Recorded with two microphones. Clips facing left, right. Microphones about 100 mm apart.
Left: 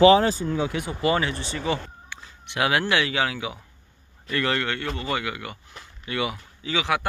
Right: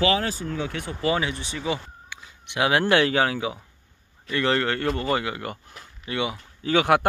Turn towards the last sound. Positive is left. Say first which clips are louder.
# right 6 dB
turn(degrees=-50)  # may be behind; listen again after turning